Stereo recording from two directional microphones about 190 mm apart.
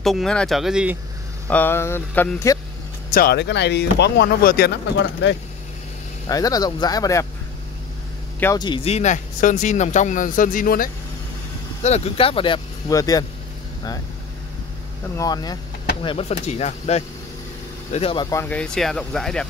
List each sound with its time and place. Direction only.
0.0 s speech: centre (ahead or behind)
1.5 s speech: 10° left (ahead or behind)
3.1 s speech: 55° left (ahead or behind)
4.9 s speech: 75° left (ahead or behind)
6.2 s speech: 20° left (ahead or behind)
8.5 s speech: 25° left (ahead or behind); by 10.9 s 45° left (ahead or behind)
11.8 s speech: 35° left (ahead or behind); by 13.2 s 20° left (ahead or behind)
15.1 s speech: 20° left (ahead or behind); by 19.4 s 5° left (ahead or behind)